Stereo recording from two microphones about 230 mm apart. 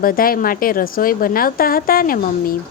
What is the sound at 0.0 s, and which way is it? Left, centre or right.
A woman's voice, left.